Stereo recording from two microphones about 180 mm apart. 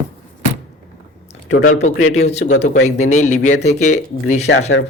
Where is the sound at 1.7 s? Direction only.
40° left (ahead or behind).